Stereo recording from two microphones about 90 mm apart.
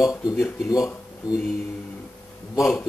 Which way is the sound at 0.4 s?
35° left (ahead or behind).